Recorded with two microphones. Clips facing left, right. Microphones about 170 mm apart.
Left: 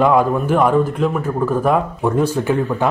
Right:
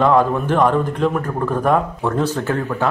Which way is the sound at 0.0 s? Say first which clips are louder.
Left 1 dB; 10° left (ahead or behind).